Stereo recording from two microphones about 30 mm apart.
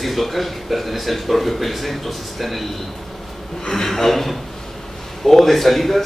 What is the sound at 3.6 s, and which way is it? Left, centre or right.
A man's voice, centre.